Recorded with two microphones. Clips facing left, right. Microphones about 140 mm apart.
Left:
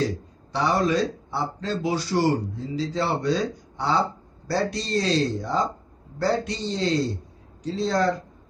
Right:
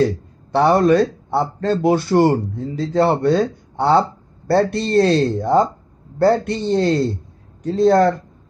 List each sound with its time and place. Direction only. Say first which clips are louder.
0.0 s a man's voice: right 8 dB; 55° right (ahead or behind)